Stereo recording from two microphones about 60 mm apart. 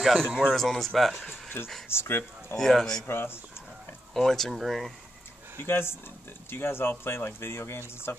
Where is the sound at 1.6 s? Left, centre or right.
Left.